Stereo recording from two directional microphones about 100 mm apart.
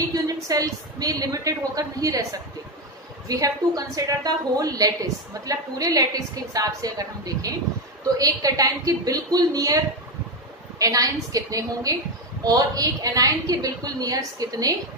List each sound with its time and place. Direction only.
0.1 s a woman's voice: 35° right (ahead or behind)
10.8 s a woman's voice: 35° right (ahead or behind)